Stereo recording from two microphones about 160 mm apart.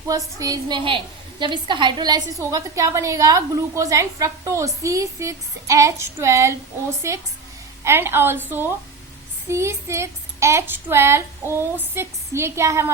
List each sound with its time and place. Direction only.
0.1 s a woman's voice: 20° right (ahead or behind)